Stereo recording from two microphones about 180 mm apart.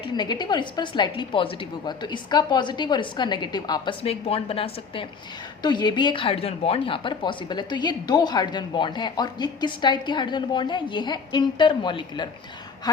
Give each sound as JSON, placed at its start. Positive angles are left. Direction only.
{"t": 0.0, "sound": "a woman's voice", "side_deg": 25}